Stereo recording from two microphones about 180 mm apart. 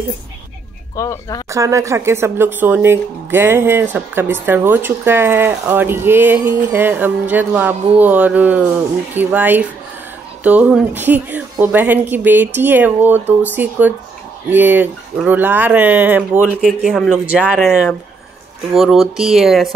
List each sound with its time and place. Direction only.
0.9 s speech: 20° left (ahead or behind)
1.5 s speech: 15° right (ahead or behind)
16.6 s speech: centre (ahead or behind)